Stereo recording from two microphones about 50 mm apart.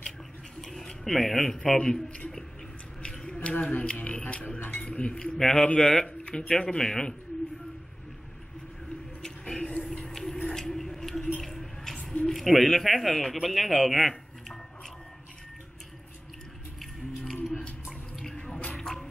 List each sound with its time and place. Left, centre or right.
0.6 s speech: centre
3.0 s a sound: centre
3.3 s speech: left
9.2 s a sound: centre
12.3 s speech: centre
18.5 s drip: centre